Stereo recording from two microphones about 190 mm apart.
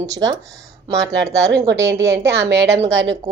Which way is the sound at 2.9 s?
70° right (ahead or behind).